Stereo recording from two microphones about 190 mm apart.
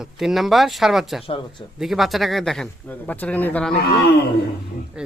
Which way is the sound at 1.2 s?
30° left (ahead or behind).